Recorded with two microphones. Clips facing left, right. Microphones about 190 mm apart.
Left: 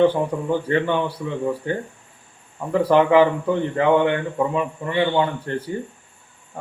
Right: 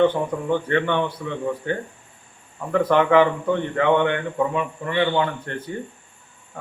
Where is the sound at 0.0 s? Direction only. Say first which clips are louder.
Left 1 dB; 10° left (ahead or behind).